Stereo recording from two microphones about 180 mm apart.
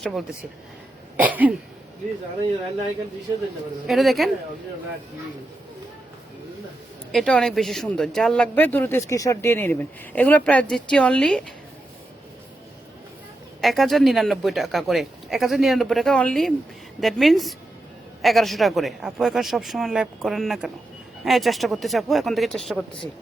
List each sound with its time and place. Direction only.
0.0 s speech: centre (ahead or behind)
1.1 s a sound: 10° right (ahead or behind)
3.8 s speech: centre (ahead or behind)
7.1 s speech: 5° left (ahead or behind)
13.6 s speech: centre (ahead or behind)